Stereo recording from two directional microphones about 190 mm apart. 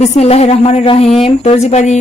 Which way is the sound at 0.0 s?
35° left (ahead or behind).